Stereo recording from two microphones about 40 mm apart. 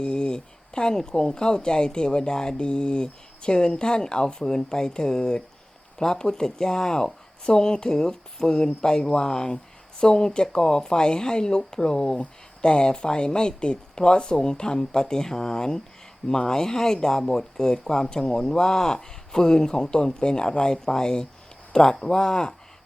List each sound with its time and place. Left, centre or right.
0.0 s speech: left